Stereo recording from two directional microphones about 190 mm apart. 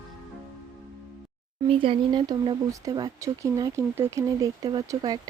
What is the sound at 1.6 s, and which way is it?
Speech, 30° right (ahead or behind).